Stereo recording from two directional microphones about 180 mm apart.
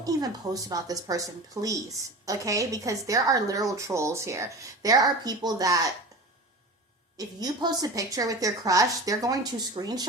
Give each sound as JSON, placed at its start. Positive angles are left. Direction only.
{"t": 0.0, "sound": "a woman's voice", "side_deg": -20}
{"t": 7.2, "sound": "a woman's voice", "side_deg": -20}